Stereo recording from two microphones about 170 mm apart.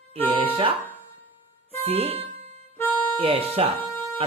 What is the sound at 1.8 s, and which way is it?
Speech, 35° right (ahead or behind).